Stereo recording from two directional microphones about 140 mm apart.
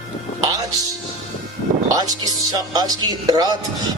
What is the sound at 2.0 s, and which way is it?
Speech, 25° right (ahead or behind).